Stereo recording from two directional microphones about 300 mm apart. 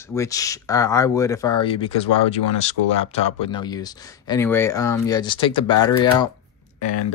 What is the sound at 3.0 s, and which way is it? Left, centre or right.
Speech, centre.